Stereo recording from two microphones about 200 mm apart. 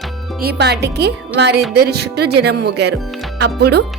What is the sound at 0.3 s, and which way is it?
Speech, 50° right (ahead or behind).